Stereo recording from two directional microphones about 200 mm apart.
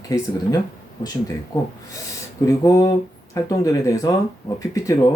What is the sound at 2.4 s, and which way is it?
Speech, 15° left (ahead or behind).